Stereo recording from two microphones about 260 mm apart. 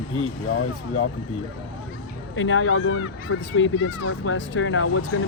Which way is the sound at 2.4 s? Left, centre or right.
Left.